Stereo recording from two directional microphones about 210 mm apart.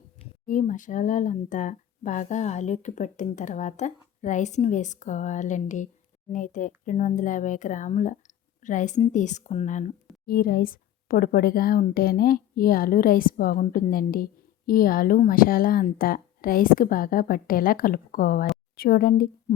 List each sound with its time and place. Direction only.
0.4 s a woman's voice: 40° left (ahead or behind)